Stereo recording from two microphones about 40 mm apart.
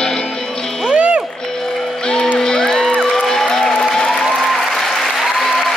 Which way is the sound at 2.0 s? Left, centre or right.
Centre.